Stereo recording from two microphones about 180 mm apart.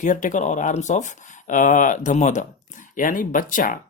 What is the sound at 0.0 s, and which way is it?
Speech, 45° left (ahead or behind).